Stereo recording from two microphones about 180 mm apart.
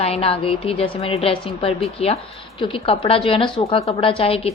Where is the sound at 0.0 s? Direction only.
35° left (ahead or behind).